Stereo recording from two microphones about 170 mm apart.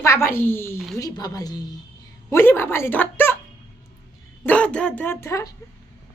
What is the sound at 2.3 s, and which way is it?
A woman's voice, 15° left (ahead or behind).